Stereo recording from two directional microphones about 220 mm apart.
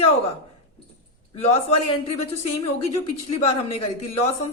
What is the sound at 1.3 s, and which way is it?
Speech, 30° left (ahead or behind).